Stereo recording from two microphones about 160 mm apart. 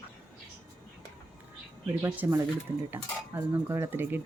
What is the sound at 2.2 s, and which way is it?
Cutlery, 10° right (ahead or behind).